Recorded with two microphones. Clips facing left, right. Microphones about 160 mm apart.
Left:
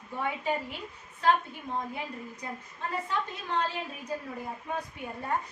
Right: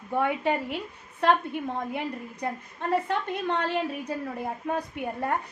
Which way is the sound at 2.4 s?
65° right (ahead or behind).